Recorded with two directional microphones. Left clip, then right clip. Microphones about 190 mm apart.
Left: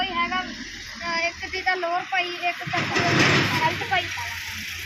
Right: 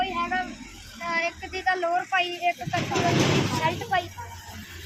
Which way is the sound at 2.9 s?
15° left (ahead or behind).